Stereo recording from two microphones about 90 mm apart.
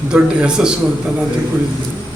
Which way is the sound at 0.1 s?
10° right (ahead or behind).